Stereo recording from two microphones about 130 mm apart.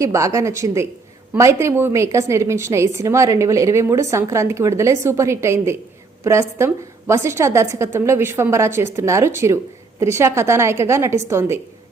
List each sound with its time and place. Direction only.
0.0 s a woman's voice: 25° right (ahead or behind)